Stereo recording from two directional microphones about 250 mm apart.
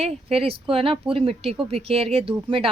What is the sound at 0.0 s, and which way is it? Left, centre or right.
Speech, right.